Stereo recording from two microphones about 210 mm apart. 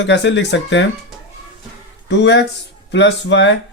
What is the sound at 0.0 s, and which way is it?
Speech, 55° left (ahead or behind).